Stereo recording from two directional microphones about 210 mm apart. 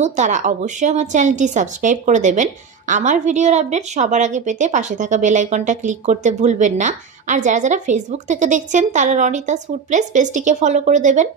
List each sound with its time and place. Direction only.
0.0 s speech: 35° right (ahead or behind)